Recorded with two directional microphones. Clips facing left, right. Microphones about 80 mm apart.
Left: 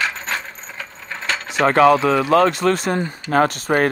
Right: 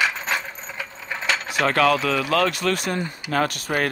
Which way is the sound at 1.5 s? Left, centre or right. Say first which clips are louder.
Left 7 dB; left.